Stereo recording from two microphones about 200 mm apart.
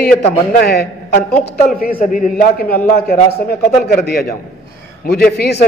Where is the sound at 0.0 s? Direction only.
55° left (ahead or behind).